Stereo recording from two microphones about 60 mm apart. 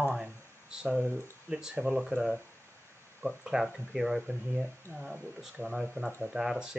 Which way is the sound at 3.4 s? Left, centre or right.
Centre.